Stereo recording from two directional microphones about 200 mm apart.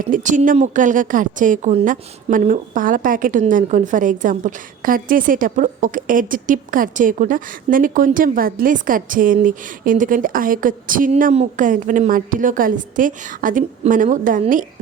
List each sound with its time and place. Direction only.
0.0 s a woman's voice: 40° right (ahead or behind)